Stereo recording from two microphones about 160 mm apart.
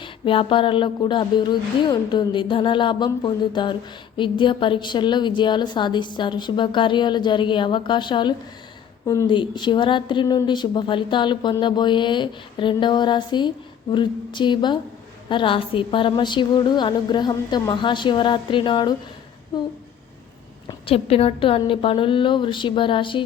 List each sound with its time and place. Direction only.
0.0 s a woman's voice: 35° left (ahead or behind)
20.7 s speech: 35° left (ahead or behind)